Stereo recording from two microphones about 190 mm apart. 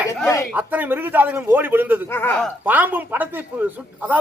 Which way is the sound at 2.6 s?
10° right (ahead or behind).